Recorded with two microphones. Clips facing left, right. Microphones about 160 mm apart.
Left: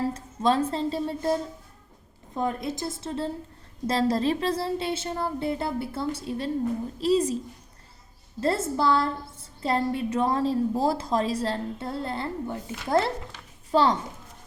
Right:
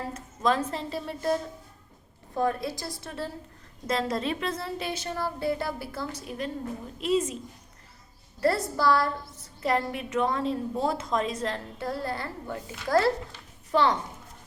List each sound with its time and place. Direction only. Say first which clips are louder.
0.0 s a woman's voice: left 3 dB; 30° left (ahead or behind)
2.4 s a woman's voice: even; 20° left (ahead or behind); by 7.3 s 35° left (ahead or behind)
8.4 s a woman's voice: left 1 dB; 25° left (ahead or behind)